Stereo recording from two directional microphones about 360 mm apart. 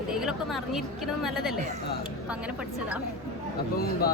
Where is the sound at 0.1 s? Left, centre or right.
Centre.